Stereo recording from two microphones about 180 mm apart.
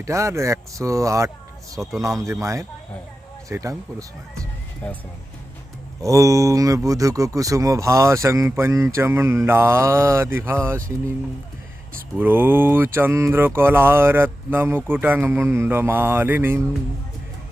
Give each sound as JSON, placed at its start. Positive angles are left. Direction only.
{"t": 0.0, "sound": "speech", "side_deg": -15}
{"t": 4.8, "sound": "speech", "side_deg": 10}
{"t": 6.0, "sound": "speech", "side_deg": -15}
{"t": 12.1, "sound": "speech", "side_deg": -10}